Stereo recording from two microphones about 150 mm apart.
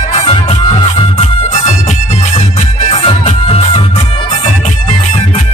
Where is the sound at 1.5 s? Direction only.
50° left (ahead or behind).